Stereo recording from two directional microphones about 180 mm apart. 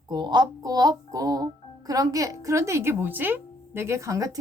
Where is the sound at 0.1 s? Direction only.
25° right (ahead or behind).